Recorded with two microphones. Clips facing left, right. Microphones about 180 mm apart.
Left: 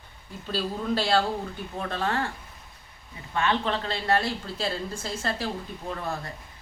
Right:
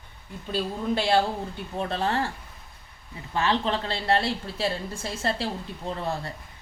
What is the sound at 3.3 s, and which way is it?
Speech, 30° right (ahead or behind).